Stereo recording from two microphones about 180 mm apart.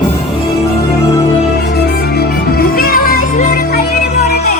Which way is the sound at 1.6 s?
65° left (ahead or behind).